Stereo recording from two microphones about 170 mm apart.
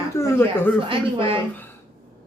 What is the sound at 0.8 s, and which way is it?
Speech, 30° right (ahead or behind).